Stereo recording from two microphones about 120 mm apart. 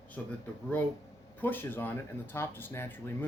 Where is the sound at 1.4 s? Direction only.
15° left (ahead or behind).